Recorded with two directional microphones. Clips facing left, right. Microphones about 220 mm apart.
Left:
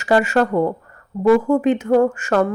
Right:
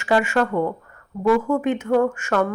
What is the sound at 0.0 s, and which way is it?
Speech, 40° left (ahead or behind).